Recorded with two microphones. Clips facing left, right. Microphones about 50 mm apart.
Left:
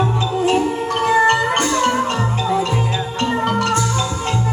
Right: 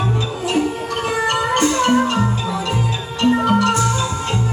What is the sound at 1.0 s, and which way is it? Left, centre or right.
Music, left.